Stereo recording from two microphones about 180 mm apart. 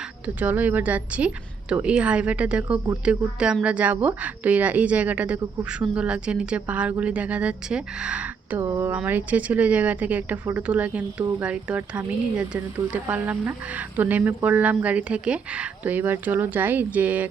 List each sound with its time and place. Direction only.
0.3 s speech: 10° right (ahead or behind)